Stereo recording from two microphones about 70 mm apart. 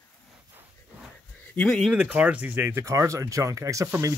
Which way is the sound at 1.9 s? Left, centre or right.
Centre.